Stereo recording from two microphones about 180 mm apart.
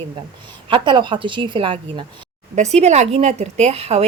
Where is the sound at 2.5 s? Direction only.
40° right (ahead or behind).